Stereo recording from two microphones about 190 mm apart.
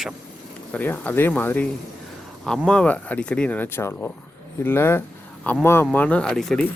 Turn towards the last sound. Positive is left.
turn(degrees=0)  # may be behind; listen again after turning